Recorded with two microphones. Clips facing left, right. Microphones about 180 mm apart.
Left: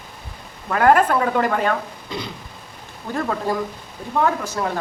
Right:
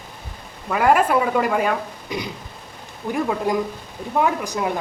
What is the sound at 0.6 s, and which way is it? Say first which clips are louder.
A woman's voice: left 2 dB; 5° right (ahead or behind).